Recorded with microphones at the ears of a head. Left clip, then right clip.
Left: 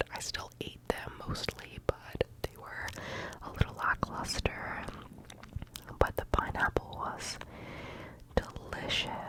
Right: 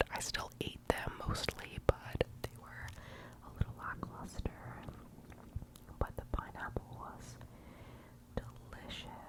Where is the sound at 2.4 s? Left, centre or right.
Left.